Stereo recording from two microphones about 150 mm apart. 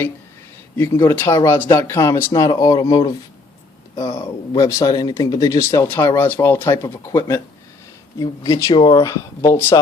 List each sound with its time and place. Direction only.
0.9 s speech: 15° left (ahead or behind)